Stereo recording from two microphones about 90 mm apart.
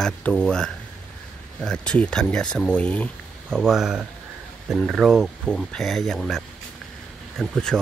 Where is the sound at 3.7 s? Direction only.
5° right (ahead or behind).